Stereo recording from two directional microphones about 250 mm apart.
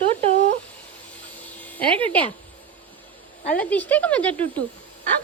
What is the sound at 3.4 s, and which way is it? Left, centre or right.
Speech, centre.